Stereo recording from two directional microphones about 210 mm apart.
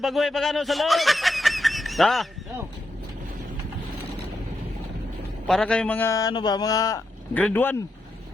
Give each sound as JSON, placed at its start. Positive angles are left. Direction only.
{"t": 0.0, "sound": "speech", "side_deg": 0}
{"t": 5.5, "sound": "speech", "side_deg": 5}